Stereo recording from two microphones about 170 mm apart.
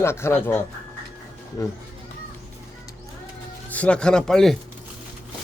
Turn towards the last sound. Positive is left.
turn(degrees=5)  # may be behind; listen again after turning